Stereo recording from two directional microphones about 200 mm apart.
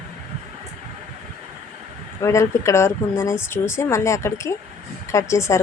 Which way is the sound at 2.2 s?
15° left (ahead or behind).